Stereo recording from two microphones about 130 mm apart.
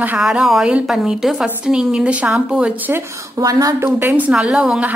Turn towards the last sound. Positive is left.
turn(degrees=-10)  # may be behind; listen again after turning